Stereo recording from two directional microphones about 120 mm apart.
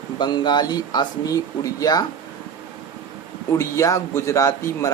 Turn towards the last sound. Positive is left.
turn(degrees=25)  # may be behind; listen again after turning